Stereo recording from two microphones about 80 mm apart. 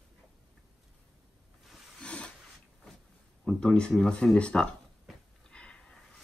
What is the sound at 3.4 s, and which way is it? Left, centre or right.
Speech, centre.